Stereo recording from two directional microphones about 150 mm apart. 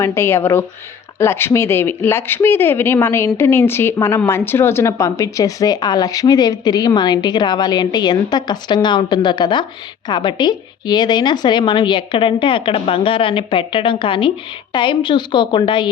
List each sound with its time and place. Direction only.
0.0 s speech: 15° left (ahead or behind); by 15.9 s 35° left (ahead or behind)